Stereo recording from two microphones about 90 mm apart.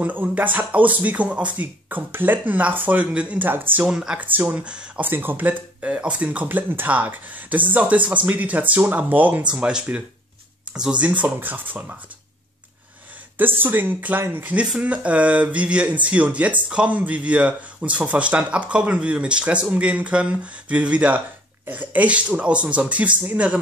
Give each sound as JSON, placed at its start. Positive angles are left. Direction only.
{"t": 0.0, "sound": "speech", "side_deg": -20}
{"t": 3.8, "sound": "speech", "side_deg": -5}
{"t": 5.1, "sound": "speech", "side_deg": -25}
{"t": 13.6, "sound": "speech", "side_deg": -20}